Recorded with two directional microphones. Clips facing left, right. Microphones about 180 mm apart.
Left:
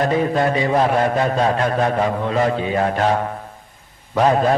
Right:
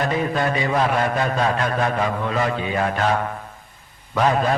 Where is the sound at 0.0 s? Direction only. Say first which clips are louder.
Left 4 dB; 35° left (ahead or behind).